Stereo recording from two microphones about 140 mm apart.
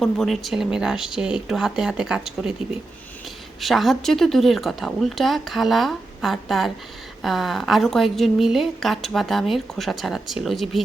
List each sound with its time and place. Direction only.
0.0 s a woman's voice: centre (ahead or behind)
3.6 s a woman's voice: centre (ahead or behind)